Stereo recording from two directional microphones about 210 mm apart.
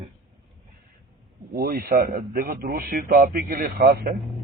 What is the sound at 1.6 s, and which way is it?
Speech, 45° right (ahead or behind).